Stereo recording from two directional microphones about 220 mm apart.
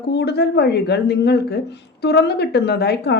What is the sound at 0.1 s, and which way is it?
Speech, 50° left (ahead or behind).